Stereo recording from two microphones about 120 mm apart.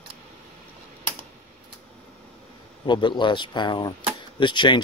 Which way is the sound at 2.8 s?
40° left (ahead or behind).